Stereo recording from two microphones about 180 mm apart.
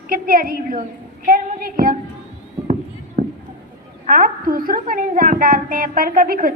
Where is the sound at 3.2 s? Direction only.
35° right (ahead or behind).